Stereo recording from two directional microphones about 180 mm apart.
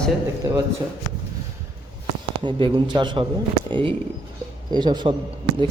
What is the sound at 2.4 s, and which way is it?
A man's voice, 25° right (ahead or behind).